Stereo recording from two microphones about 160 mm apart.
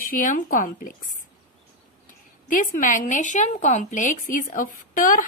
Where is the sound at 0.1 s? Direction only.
60° left (ahead or behind).